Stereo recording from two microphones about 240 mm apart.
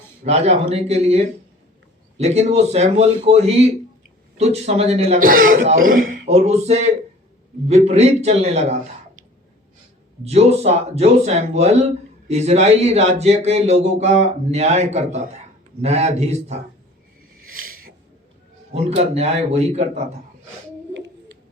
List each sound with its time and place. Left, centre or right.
0.3 s speech: right
10.2 s speech: right
17.6 s a sound: right
18.7 s speech: right